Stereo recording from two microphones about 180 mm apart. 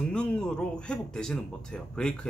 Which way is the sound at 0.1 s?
5° left (ahead or behind).